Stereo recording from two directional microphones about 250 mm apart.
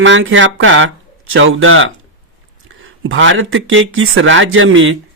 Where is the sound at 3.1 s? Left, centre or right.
Right.